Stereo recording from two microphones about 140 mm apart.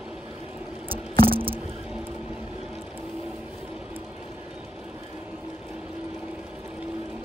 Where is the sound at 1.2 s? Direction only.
40° right (ahead or behind).